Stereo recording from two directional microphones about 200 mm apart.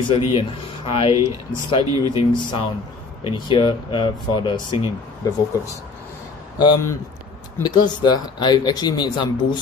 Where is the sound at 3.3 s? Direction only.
25° left (ahead or behind).